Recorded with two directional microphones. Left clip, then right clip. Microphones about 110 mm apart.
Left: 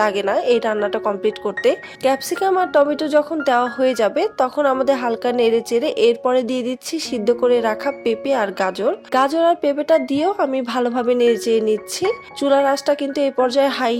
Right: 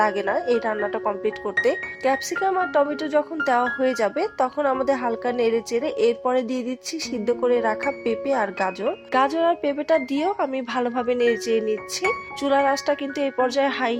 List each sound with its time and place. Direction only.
0.3 s speech: 55° left (ahead or behind)